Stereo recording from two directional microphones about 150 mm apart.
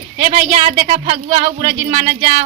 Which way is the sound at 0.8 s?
45° right (ahead or behind).